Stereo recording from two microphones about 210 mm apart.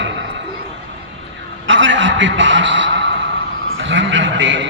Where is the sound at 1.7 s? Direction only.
60° right (ahead or behind).